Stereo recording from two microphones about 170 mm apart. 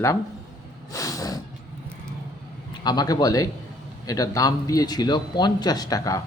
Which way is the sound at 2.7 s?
25° left (ahead or behind).